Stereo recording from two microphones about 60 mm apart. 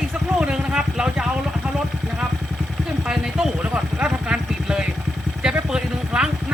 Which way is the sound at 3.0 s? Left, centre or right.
Centre.